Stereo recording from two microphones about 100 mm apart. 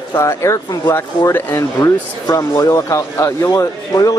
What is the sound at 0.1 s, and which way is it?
Speech, 30° left (ahead or behind).